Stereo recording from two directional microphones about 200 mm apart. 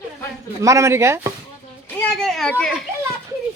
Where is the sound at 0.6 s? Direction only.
15° right (ahead or behind).